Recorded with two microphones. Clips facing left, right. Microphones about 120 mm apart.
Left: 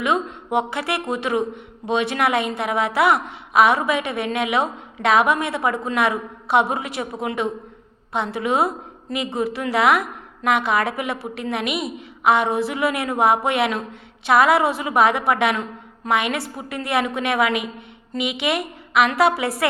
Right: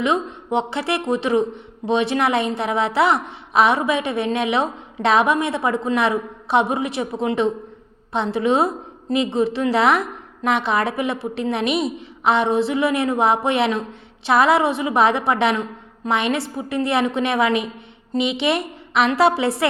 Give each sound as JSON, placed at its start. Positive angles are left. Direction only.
{"t": 0.0, "sound": "a woman's voice", "side_deg": -25}